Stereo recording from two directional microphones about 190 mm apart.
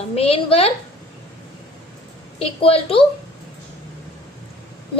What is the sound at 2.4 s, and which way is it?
Speech, 30° left (ahead or behind).